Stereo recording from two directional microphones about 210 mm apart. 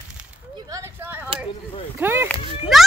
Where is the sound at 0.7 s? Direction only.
15° right (ahead or behind).